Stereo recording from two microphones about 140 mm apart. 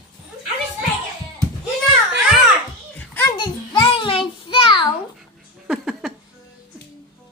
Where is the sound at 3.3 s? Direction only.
35° left (ahead or behind).